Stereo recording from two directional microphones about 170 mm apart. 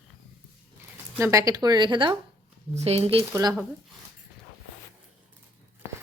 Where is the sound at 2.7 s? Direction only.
40° right (ahead or behind).